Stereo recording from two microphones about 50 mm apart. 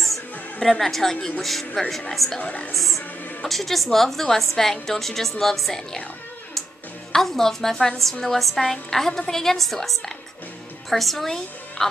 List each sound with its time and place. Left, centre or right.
0.6 s a woman's voice: centre
2.4 s a woman's voice: left
2.7 s a woman's voice: centre
7.1 s a woman's voice: centre
11.2 s a woman's voice: centre